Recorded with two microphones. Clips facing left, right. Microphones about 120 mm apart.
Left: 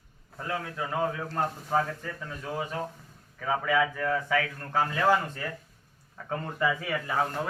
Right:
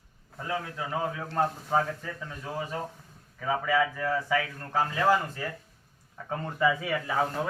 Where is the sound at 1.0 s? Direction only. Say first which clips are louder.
Right 3 dB; 5° right (ahead or behind).